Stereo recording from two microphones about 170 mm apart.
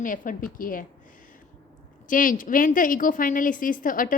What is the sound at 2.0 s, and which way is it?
A woman's voice, 50° left (ahead or behind).